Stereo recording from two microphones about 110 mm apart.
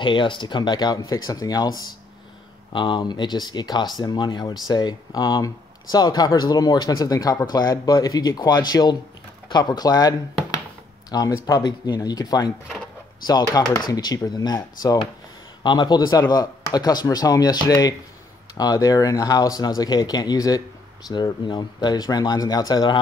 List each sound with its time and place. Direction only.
0.0 s speech: 45° left (ahead or behind)